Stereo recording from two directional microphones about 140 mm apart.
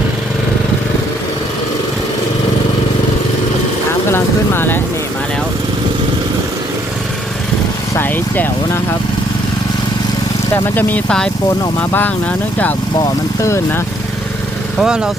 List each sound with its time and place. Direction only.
4.1 s speech: 15° left (ahead or behind)
7.9 s speech: 15° left (ahead or behind)
10.5 s speech: 15° left (ahead or behind)
13.4 s speech: 20° left (ahead or behind)
14.8 s speech: 5° right (ahead or behind)